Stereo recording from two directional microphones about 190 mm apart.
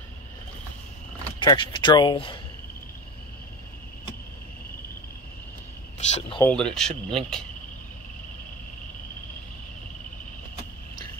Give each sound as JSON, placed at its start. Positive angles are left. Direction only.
{"t": 1.4, "sound": "speech", "side_deg": 25}
{"t": 5.9, "sound": "cricket", "side_deg": 30}
{"t": 6.4, "sound": "speech", "side_deg": 5}